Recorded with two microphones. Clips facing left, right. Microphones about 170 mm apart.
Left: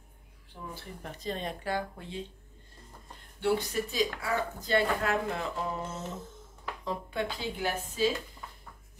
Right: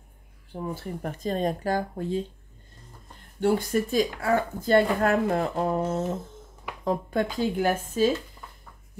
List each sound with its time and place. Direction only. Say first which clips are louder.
0.5 s speech: right 10 dB; 45° right (ahead or behind)
3.3 s speech: right 5 dB; 45° right (ahead or behind)